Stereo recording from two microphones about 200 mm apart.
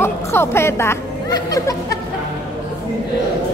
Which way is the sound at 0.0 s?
10° left (ahead or behind).